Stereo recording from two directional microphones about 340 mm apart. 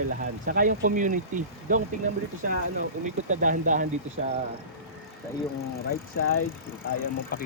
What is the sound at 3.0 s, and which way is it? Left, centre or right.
Speech, right.